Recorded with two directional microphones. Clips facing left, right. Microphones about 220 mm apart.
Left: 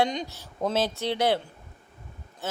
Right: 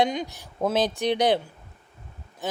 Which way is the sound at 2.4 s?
15° right (ahead or behind).